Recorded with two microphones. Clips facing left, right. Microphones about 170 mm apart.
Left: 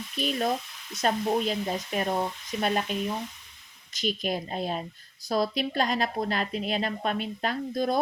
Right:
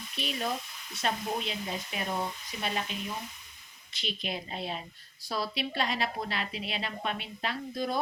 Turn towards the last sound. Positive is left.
turn(degrees=40)  # may be behind; listen again after turning